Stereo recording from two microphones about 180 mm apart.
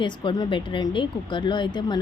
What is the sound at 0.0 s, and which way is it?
Speech, 25° left (ahead or behind).